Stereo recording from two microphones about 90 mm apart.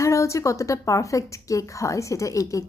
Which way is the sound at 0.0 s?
35° left (ahead or behind).